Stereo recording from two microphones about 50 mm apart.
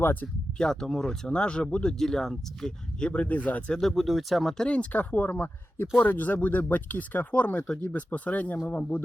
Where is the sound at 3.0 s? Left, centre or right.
Left.